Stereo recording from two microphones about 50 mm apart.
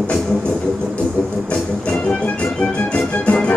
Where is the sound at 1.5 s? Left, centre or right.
Left.